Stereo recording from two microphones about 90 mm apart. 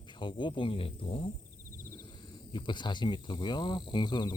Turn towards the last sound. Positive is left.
turn(degrees=55)  # may be behind; listen again after turning